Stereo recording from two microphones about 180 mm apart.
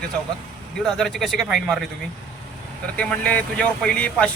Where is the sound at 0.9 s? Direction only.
5° left (ahead or behind).